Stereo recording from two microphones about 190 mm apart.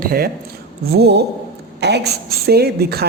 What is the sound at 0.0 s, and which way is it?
Speech, 50° right (ahead or behind).